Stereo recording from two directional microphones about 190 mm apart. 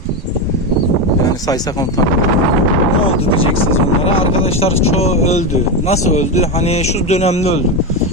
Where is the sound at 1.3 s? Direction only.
20° left (ahead or behind).